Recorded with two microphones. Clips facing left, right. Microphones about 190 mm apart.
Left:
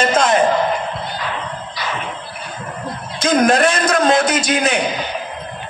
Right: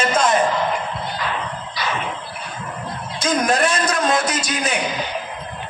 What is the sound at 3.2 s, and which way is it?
A man's voice, 55° left (ahead or behind).